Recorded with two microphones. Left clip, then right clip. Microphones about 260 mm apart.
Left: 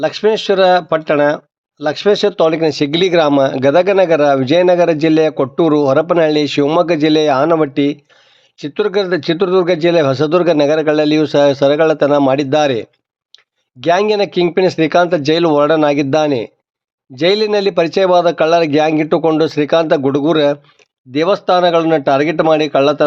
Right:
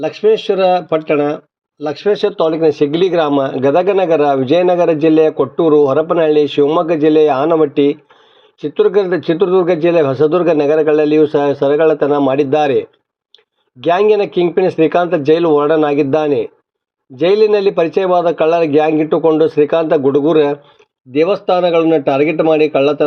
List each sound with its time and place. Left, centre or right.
0.0 s a man's voice: left
7.7 s speech: left
8.7 s a man's voice: centre
13.8 s a man's voice: left